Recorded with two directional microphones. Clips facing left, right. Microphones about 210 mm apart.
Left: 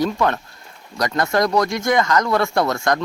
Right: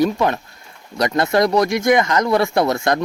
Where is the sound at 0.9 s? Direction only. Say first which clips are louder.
Right 3 dB; 25° right (ahead or behind).